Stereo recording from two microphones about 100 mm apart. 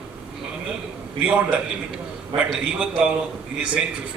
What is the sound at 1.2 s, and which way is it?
A man's voice, 10° right (ahead or behind).